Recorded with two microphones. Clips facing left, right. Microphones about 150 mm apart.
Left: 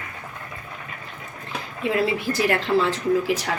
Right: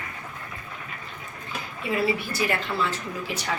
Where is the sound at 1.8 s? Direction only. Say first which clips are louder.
Left 3 dB; 90° left.